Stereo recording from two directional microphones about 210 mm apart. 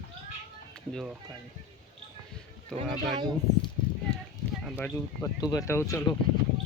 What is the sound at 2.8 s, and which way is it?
Speech, centre (ahead or behind).